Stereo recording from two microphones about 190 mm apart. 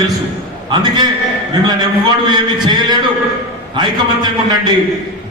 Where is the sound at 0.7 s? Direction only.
25° right (ahead or behind).